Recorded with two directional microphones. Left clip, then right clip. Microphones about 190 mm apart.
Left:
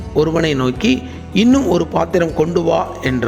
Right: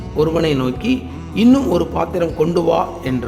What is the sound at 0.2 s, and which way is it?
A man's voice, 20° left (ahead or behind).